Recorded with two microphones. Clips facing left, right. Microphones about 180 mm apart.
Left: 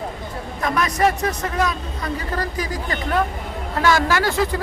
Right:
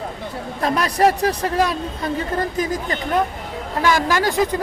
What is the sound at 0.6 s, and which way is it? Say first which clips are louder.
A man's voice: right 2 dB; 30° right (ahead or behind).